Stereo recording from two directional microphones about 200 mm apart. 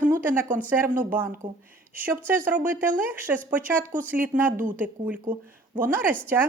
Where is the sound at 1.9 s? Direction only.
10° right (ahead or behind).